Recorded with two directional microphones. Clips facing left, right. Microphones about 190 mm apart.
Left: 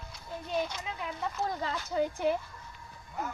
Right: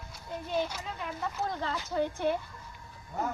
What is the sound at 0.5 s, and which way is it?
Speech, 10° right (ahead or behind).